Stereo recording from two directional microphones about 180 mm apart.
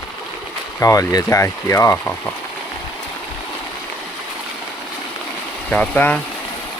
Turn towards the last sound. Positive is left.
turn(degrees=10)  # may be behind; listen again after turning